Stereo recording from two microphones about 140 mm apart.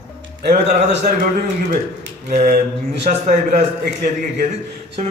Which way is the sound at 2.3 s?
60° right (ahead or behind).